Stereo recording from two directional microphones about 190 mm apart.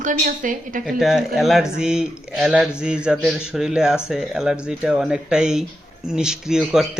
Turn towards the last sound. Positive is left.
turn(degrees=-5)  # may be behind; listen again after turning